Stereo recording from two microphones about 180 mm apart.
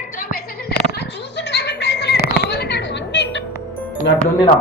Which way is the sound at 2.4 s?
65° left (ahead or behind).